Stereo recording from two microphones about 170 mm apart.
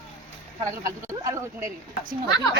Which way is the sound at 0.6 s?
20° right (ahead or behind).